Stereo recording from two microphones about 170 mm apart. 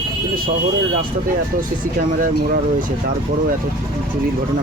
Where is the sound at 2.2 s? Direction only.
55° right (ahead or behind).